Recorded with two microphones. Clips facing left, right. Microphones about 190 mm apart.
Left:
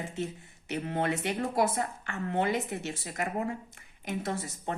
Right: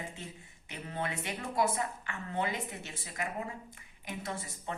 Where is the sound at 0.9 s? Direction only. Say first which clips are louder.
Left 6 dB; 60° left (ahead or behind).